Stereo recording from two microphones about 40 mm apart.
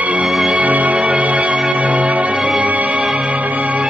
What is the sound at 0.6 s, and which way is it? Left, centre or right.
Music, right.